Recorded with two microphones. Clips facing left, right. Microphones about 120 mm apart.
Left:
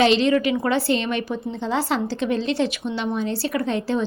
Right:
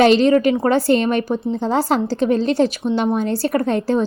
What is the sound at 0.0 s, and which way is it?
Speech, 45° right (ahead or behind).